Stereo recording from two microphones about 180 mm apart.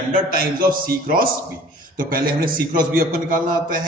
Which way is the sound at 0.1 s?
55° right (ahead or behind).